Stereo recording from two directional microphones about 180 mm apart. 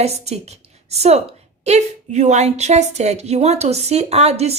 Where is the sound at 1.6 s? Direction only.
40° right (ahead or behind).